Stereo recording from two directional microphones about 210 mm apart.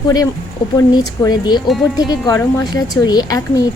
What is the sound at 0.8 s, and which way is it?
A woman's voice, 20° left (ahead or behind).